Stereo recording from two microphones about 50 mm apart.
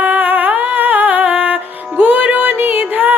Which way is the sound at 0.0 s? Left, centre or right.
Right.